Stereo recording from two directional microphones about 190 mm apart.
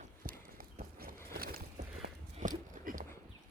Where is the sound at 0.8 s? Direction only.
50° right (ahead or behind).